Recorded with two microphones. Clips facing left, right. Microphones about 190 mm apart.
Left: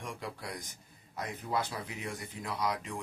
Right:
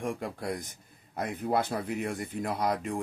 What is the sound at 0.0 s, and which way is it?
Speech, 55° right (ahead or behind).